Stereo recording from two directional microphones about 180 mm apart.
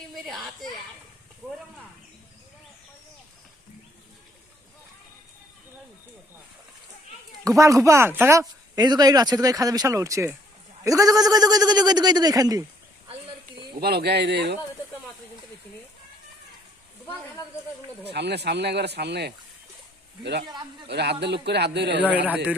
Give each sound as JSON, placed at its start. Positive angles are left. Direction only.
{"t": 0.1, "sound": "speech", "side_deg": 0}
{"t": 7.4, "sound": "speech", "side_deg": -15}
{"t": 13.7, "sound": "speech", "side_deg": -60}
{"t": 18.1, "sound": "speech", "side_deg": -70}
{"t": 20.8, "sound": "speech", "side_deg": -70}
{"t": 22.0, "sound": "speech", "side_deg": -5}